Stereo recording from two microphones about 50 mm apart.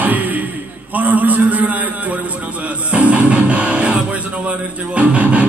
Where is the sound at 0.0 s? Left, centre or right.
Right.